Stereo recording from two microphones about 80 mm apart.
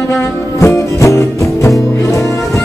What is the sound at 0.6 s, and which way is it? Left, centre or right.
Music, left.